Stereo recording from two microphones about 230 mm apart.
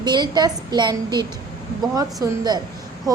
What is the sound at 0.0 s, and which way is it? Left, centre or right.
A woman's voice, centre.